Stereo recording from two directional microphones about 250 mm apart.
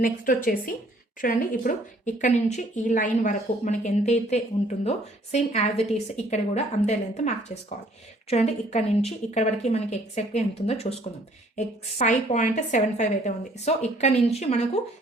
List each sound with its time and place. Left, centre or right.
0.0 s a woman's voice: left